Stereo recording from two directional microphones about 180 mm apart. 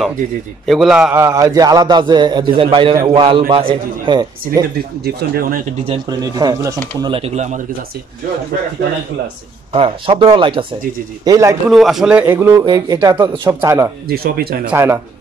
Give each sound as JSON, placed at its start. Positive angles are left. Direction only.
{"t": 0.7, "sound": "a man's voice", "side_deg": 0}
{"t": 4.7, "sound": "speech", "side_deg": -60}
{"t": 5.9, "sound": "a man's voice", "side_deg": -20}
{"t": 9.7, "sound": "a man's voice", "side_deg": -30}
{"t": 11.2, "sound": "a man's voice", "side_deg": -15}
{"t": 11.7, "sound": "a man's voice", "side_deg": 0}
{"t": 14.0, "sound": "speech", "side_deg": -60}
{"t": 14.7, "sound": "a man's voice", "side_deg": -15}